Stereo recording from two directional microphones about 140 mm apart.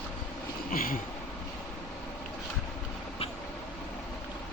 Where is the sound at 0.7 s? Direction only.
90° left.